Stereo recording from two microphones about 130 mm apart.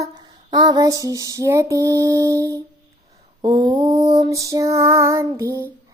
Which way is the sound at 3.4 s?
35° right (ahead or behind).